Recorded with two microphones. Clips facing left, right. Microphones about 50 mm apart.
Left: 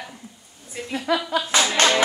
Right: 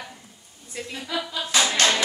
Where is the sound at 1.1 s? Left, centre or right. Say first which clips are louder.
Left 7 dB; left.